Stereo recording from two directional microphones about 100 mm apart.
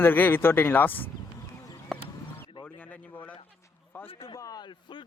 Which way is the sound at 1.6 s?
30° left (ahead or behind).